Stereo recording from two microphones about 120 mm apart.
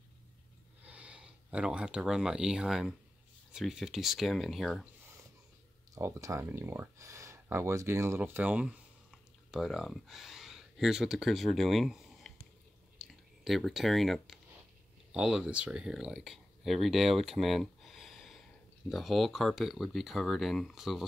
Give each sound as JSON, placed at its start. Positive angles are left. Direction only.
{"t": 0.8, "sound": "speech", "side_deg": -10}
{"t": 5.9, "sound": "speech", "side_deg": -25}
{"t": 9.1, "sound": "speech", "side_deg": 0}